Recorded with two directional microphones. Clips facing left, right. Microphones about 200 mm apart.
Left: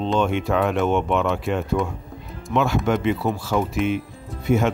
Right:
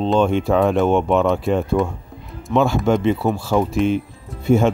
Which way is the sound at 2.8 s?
30° right (ahead or behind).